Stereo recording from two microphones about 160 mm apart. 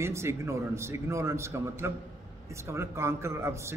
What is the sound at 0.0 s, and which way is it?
A man's voice, 15° right (ahead or behind).